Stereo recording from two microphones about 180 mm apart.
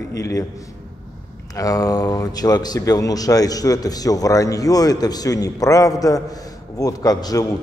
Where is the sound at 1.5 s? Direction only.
20° left (ahead or behind).